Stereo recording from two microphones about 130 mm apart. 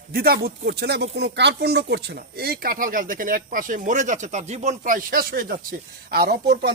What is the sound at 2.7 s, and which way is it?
Speech, 90° right.